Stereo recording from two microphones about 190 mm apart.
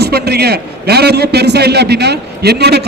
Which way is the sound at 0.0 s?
55° right (ahead or behind).